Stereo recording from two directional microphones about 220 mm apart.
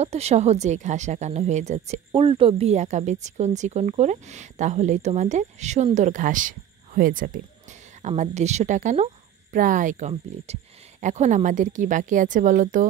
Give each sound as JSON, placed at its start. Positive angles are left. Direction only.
{"t": 0.0, "sound": "a woman's voice", "side_deg": -30}